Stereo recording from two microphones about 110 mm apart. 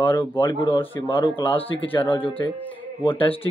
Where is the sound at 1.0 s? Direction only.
50° left (ahead or behind).